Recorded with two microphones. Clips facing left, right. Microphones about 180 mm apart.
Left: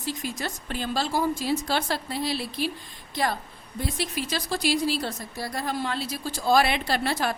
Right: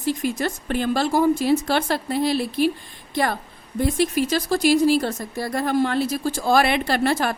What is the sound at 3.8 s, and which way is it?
Speech, 50° right (ahead or behind).